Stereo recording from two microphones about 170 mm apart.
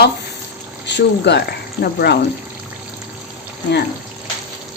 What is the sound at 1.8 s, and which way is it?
Speech, 70° left (ahead or behind).